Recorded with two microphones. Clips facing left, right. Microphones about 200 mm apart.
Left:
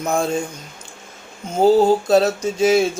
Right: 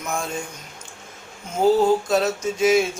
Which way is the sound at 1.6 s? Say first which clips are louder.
Left 3 dB; 30° left (ahead or behind).